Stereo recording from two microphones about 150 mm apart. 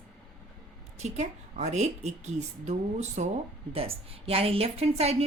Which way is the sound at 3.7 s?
40° right (ahead or behind).